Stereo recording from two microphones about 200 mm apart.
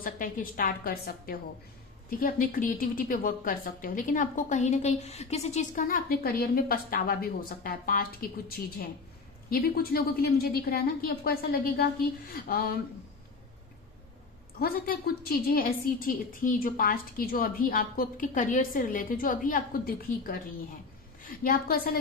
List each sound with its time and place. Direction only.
0.0 s a woman's voice: 45° left (ahead or behind)
9.5 s a woman's voice: 50° left (ahead or behind)
14.6 s a woman's voice: 50° left (ahead or behind)